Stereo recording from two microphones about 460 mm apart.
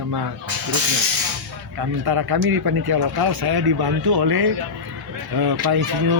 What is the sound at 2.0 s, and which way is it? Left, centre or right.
Speech, right.